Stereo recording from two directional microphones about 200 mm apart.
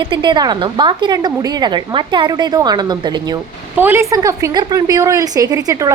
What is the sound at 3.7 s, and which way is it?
A woman's voice, 10° right (ahead or behind).